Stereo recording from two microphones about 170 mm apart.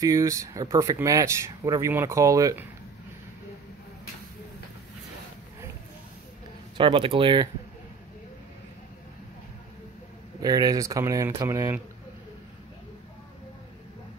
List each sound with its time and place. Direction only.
0.0 s speech: 20° right (ahead or behind)
6.8 s speech: 30° right (ahead or behind)
10.4 s speech: 25° right (ahead or behind)